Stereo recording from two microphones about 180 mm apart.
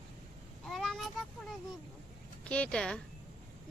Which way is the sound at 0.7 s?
Centre (ahead or behind).